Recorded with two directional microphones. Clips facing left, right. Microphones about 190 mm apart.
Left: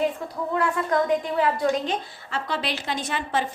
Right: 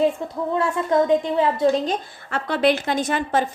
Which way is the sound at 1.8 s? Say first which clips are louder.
Right 3 dB; 45° right (ahead or behind).